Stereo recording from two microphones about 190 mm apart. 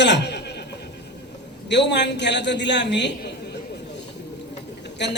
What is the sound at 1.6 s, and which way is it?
A man's voice, 65° left (ahead or behind).